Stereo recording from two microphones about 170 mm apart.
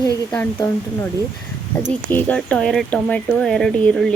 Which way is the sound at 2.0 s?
10° left (ahead or behind).